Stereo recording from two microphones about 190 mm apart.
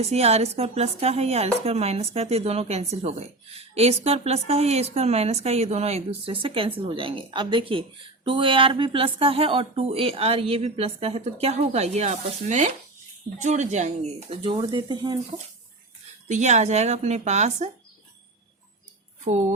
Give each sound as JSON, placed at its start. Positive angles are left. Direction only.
{"t": 0.0, "sound": "speech", "side_deg": -35}
{"t": 16.3, "sound": "speech", "side_deg": -40}
{"t": 19.2, "sound": "speech", "side_deg": -35}